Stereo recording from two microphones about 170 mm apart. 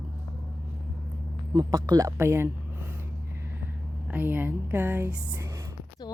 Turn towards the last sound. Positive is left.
turn(degrees=-10)  # may be behind; listen again after turning